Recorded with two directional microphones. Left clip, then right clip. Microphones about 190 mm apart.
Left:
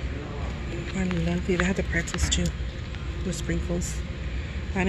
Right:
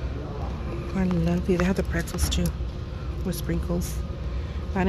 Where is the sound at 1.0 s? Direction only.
5° right (ahead or behind).